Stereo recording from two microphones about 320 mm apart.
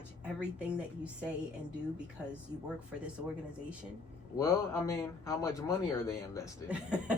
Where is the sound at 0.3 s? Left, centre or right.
Centre.